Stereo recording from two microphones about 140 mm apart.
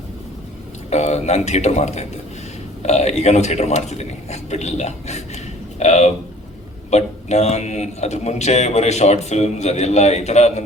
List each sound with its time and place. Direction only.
0.9 s a man's voice: 55° left (ahead or behind)